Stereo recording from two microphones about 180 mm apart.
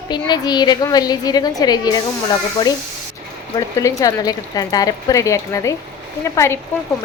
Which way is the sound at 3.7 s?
20° left (ahead or behind).